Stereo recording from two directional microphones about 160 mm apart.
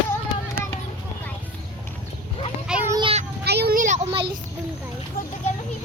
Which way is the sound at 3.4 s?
85° right.